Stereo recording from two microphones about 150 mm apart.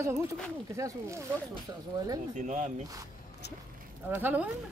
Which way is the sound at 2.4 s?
55° right (ahead or behind).